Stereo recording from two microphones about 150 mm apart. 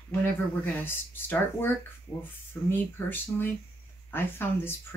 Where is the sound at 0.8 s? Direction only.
15° left (ahead or behind).